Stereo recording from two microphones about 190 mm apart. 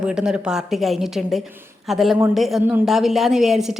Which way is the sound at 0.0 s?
5° right (ahead or behind).